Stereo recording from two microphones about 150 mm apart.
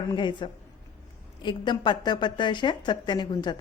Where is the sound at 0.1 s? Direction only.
30° left (ahead or behind).